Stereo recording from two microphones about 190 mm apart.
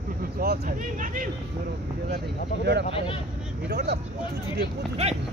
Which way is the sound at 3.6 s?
60° right (ahead or behind).